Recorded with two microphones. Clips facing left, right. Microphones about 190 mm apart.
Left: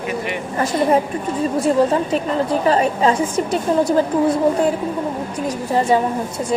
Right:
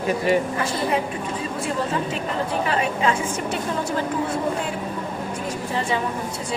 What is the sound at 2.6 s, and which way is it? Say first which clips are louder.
A woman's voice: left 7 dB; 40° left (ahead or behind).